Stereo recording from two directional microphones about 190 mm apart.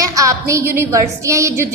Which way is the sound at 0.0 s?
15° right (ahead or behind).